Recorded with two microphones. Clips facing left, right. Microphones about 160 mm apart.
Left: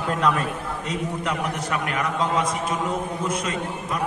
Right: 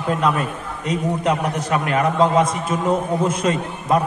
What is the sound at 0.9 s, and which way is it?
A man's voice, 25° right (ahead or behind).